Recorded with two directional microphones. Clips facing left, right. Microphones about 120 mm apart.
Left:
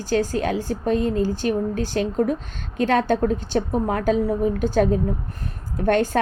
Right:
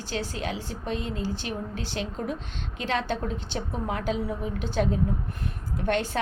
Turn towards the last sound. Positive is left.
turn(degrees=45)  # may be behind; listen again after turning